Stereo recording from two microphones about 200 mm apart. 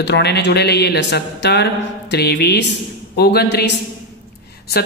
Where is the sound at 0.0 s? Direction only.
55° left (ahead or behind).